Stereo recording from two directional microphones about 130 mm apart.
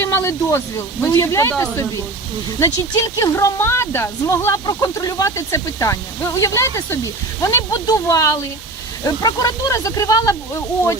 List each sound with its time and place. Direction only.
0.0 s speech: 20° left (ahead or behind)